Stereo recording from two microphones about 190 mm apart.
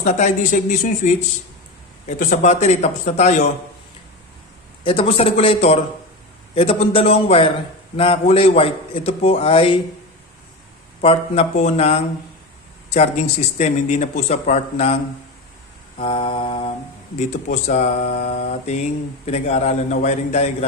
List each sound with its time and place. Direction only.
0.0 s speech: 40° left (ahead or behind)
4.8 s speech: 30° left (ahead or behind)
11.0 s speech: 30° left (ahead or behind)
16.0 s speech: 30° left (ahead or behind)
17.2 s speech: 40° left (ahead or behind)